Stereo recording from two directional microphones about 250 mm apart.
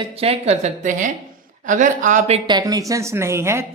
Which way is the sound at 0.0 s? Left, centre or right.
Right.